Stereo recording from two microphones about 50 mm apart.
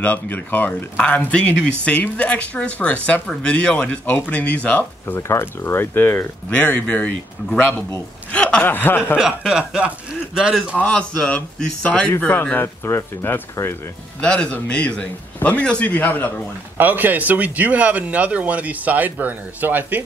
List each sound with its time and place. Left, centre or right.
0.0 s speech: left
0.9 s speech: left
4.0 s speech: left
5.3 s speech: left
6.5 s speech: left
8.3 s a sound: centre
8.6 s speech: left
9.2 s speech: centre
10.8 s speech: centre
12.3 s speech: left
12.6 s speech: left
13.2 s speech: left
14.2 s speech: left
16.7 s speech: right